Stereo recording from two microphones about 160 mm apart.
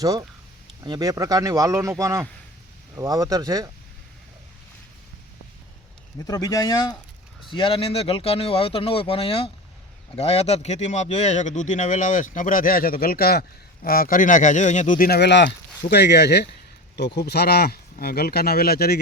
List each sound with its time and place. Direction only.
0.0 s speech: 25° right (ahead or behind)
6.1 s speech: 20° left (ahead or behind); by 18.9 s 75° left (ahead or behind)